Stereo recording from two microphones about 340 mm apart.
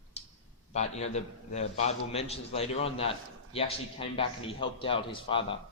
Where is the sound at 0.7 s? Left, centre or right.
Centre.